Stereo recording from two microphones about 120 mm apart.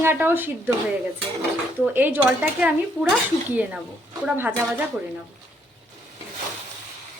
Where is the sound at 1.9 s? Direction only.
15° right (ahead or behind).